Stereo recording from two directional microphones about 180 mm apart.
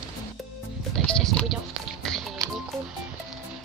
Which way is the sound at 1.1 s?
5° left (ahead or behind).